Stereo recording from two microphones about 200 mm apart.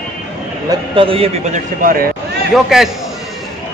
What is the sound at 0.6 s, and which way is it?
A man's voice, 25° right (ahead or behind).